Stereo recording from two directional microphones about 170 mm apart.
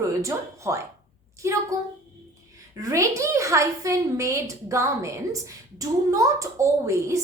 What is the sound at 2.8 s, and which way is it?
A woman's voice, 20° right (ahead or behind).